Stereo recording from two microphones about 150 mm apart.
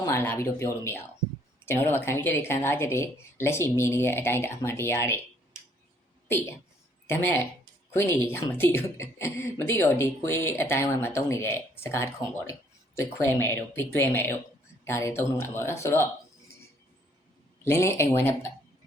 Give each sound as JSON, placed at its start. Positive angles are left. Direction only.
{"t": 0.0, "sound": "speech", "side_deg": 15}
{"t": 6.2, "sound": "a woman's voice", "side_deg": 15}
{"t": 17.6, "sound": "speech", "side_deg": 20}